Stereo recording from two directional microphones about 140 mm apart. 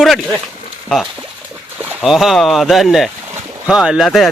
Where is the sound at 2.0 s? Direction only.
Centre (ahead or behind).